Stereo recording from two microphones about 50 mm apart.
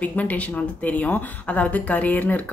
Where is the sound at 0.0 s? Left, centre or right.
Left.